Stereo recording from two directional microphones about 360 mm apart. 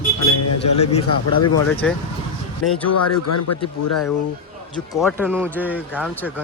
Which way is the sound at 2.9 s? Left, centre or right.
Left.